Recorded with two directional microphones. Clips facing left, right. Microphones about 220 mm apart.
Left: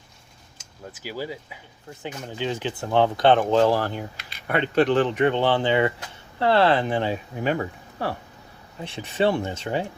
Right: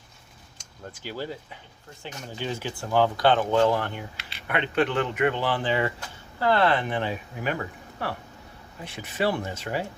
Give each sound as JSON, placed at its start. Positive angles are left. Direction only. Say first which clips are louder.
{"t": 0.6, "sound": "speech", "louder": "left 1 dB", "side_deg": 5}
{"t": 8.8, "sound": "speech", "louder": "left 4 dB", "side_deg": 30}